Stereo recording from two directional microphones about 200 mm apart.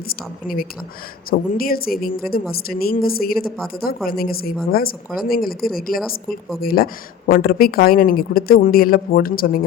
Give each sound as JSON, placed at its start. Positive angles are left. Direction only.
{"t": 0.1, "sound": "speech", "side_deg": 45}